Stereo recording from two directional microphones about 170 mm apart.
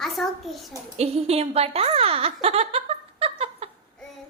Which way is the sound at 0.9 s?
40° right (ahead or behind).